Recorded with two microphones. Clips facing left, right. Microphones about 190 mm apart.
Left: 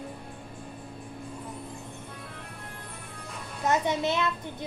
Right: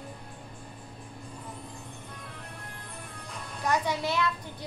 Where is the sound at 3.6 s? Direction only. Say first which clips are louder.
Left 3 dB; 20° left (ahead or behind).